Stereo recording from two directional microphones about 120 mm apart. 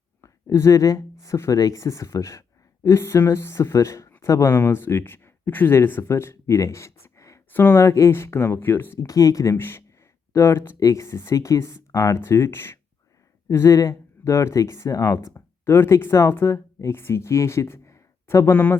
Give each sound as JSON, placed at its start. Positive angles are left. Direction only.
{"t": 0.2, "sound": "speech", "side_deg": 25}